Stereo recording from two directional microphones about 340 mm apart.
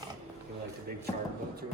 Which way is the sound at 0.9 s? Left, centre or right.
Right.